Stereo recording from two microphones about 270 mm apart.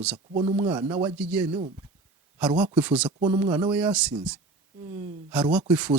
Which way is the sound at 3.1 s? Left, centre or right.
Centre.